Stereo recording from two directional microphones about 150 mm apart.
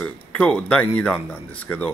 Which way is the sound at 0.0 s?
10° left (ahead or behind).